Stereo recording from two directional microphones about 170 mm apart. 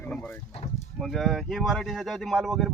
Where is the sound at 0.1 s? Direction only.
5° left (ahead or behind).